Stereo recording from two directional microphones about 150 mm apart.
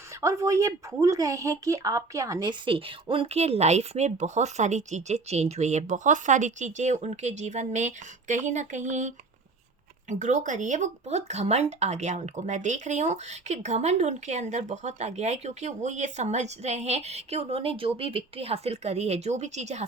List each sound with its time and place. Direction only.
0.2 s speech: 20° right (ahead or behind); by 19.8 s 50° right (ahead or behind)